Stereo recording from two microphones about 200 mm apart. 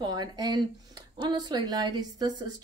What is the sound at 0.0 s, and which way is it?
Speech, 20° right (ahead or behind).